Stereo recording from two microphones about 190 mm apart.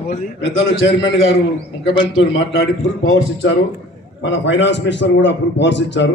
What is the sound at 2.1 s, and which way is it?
A man's voice, 75° left (ahead or behind).